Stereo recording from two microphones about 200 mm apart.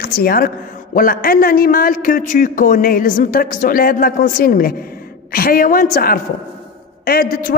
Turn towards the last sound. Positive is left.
turn(degrees=50)  # may be behind; listen again after turning